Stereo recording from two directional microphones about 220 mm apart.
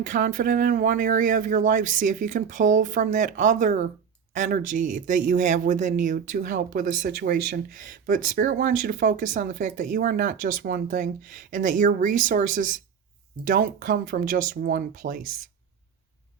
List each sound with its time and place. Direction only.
0.0 s speech: 35° right (ahead or behind)